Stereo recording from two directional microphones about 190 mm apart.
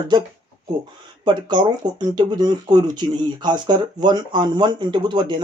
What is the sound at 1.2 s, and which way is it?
Speech, 25° right (ahead or behind).